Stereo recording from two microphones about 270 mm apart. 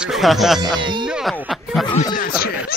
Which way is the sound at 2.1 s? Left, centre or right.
Left.